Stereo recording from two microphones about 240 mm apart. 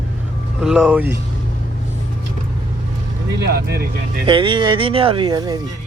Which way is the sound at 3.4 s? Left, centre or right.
Right.